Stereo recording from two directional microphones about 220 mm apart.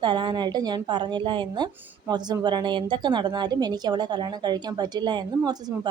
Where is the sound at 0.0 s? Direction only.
20° right (ahead or behind).